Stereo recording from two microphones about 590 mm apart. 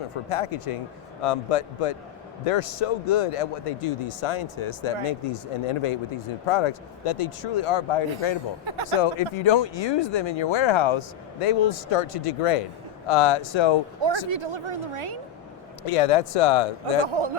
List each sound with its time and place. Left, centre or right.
0.3 s speech: left
8.6 s speech: right
9.0 s speech: left
14.0 s speech: right
15.9 s speech: left
17.1 s speech: right